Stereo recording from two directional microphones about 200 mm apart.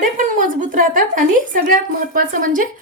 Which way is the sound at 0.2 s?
40° right (ahead or behind).